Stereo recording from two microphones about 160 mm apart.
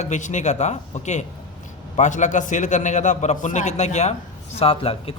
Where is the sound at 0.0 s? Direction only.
50° left (ahead or behind).